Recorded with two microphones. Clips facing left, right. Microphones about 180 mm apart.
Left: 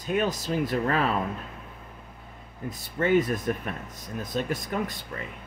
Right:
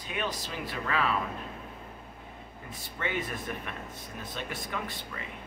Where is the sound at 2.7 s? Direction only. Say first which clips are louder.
Left 11 dB; 40° left (ahead or behind).